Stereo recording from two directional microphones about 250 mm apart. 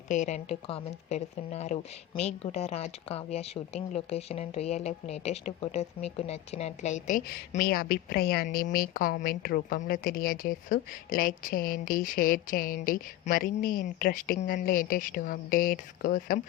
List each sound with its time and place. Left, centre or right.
0.1 s a woman's voice: left